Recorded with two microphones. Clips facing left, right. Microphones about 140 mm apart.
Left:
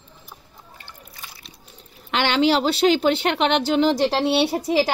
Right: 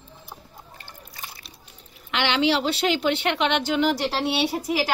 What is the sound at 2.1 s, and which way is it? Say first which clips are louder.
A woman's voice: left 3 dB; 40° left (ahead or behind).